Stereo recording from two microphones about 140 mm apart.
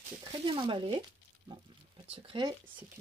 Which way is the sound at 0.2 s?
35° right (ahead or behind).